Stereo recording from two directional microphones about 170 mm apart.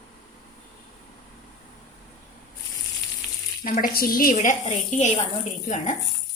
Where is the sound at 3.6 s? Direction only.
50° left (ahead or behind).